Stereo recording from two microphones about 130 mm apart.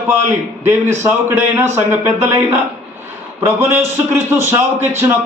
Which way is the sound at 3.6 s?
20° right (ahead or behind).